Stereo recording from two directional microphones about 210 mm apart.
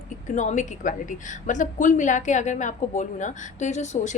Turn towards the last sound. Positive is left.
turn(degrees=35)  # may be behind; listen again after turning